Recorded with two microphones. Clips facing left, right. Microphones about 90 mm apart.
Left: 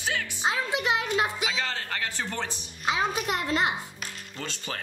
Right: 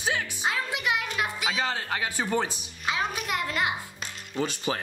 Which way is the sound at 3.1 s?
25° left (ahead or behind).